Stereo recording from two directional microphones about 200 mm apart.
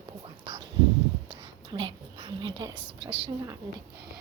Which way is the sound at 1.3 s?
25° right (ahead or behind).